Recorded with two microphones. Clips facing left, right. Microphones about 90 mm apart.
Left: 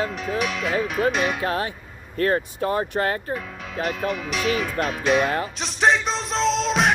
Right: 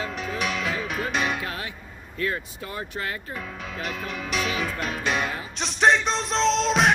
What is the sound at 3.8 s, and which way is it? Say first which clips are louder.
Speech: left 7 dB; centre (ahead or behind).